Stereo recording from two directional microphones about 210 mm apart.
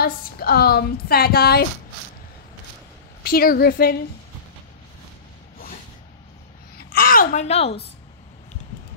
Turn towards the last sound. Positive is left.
turn(degrees=30)  # may be behind; listen again after turning